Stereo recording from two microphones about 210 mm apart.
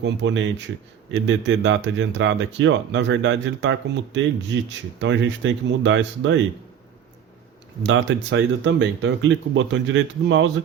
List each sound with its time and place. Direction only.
0.0 s speech: 55° right (ahead or behind)
7.9 s speech: 60° right (ahead or behind)